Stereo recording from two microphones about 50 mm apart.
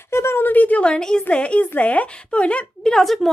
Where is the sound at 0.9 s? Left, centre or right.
Centre.